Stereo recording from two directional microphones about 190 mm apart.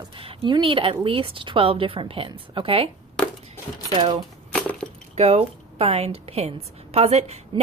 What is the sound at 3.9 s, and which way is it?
Speech, 30° right (ahead or behind).